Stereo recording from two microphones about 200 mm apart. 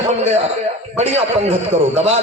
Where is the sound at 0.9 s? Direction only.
35° right (ahead or behind).